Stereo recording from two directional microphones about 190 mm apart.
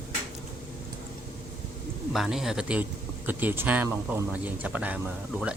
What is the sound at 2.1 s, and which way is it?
Speech, centre (ahead or behind).